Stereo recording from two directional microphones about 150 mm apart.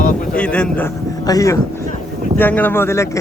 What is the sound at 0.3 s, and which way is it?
Speech, 5° left (ahead or behind).